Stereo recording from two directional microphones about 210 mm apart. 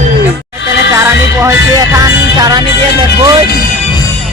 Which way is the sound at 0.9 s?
15° right (ahead or behind).